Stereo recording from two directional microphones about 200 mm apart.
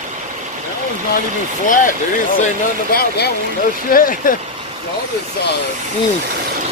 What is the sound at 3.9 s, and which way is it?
Speech, 45° left (ahead or behind).